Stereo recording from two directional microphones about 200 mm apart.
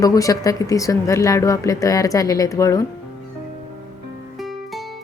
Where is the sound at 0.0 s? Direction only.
15° left (ahead or behind).